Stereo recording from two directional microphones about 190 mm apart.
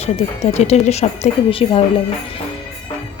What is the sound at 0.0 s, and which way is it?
A woman's voice, 35° left (ahead or behind).